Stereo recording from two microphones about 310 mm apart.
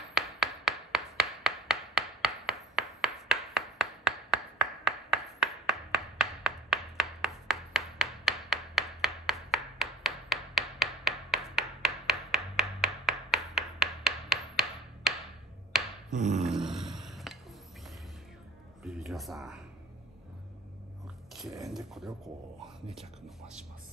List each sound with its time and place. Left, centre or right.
0.1 s tap: centre
15.7 s dog: centre
16.1 s dog: right
16.3 s a sound: centre
18.9 s a sound: centre
21.6 s speech: centre